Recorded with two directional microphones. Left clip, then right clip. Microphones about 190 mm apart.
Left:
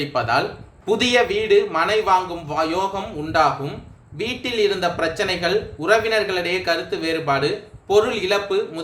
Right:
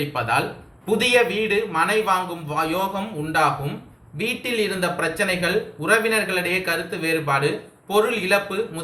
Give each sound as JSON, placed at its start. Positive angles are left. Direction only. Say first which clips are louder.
{"t": 0.1, "sound": "speech", "louder": "left 4 dB", "side_deg": 50}